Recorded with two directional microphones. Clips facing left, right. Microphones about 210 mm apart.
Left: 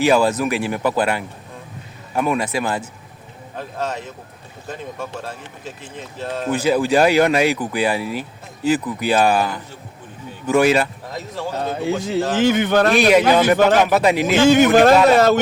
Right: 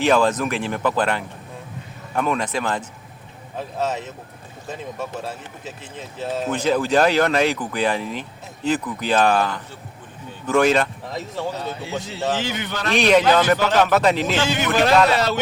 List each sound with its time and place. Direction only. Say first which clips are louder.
0.0 s speech: left 2 dB; 10° left (ahead or behind)
3.5 s speech: right 1 dB; centre (ahead or behind)
6.5 s speech: left 3 dB; 10° left (ahead or behind)
11.5 s a man's voice: left 6 dB; 50° left (ahead or behind)
13.0 s speech: right 2 dB; 10° left (ahead or behind)
14.4 s a man's voice: left 11 dB; 50° left (ahead or behind)